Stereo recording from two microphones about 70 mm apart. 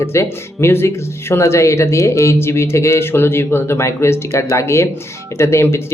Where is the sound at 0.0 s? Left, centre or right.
Left.